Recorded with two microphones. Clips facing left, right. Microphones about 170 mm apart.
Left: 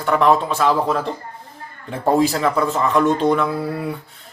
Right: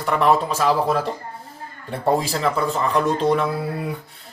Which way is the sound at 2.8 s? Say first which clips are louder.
Left 4 dB; 35° right (ahead or behind).